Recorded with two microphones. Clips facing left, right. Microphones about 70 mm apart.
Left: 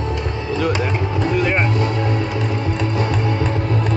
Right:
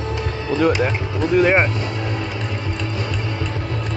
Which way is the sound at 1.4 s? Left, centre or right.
Centre.